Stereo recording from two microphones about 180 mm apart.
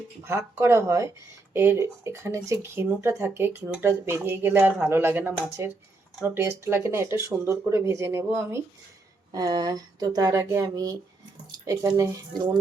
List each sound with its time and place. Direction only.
0.3 s speech: 15° right (ahead or behind)